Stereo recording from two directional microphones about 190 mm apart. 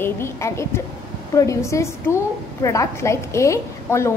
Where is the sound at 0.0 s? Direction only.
15° left (ahead or behind).